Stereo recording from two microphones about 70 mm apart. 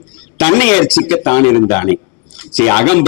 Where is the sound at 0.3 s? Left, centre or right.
Left.